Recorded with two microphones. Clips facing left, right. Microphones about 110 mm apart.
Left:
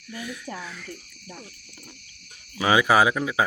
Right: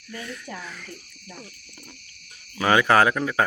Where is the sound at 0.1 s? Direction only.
10° left (ahead or behind).